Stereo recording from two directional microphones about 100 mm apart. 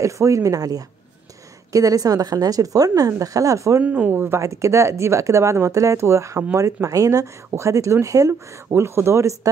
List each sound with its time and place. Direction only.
0.0 s a woman's voice: 30° right (ahead or behind)
3.8 s speech: 15° right (ahead or behind); by 9.5 s 30° right (ahead or behind)